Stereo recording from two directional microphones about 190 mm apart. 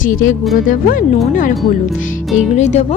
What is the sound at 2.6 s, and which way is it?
Speech, 35° left (ahead or behind).